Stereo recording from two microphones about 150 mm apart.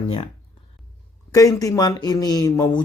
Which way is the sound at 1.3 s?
20° left (ahead or behind).